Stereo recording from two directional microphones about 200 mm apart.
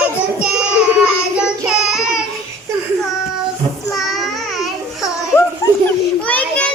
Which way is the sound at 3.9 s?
Centre (ahead or behind).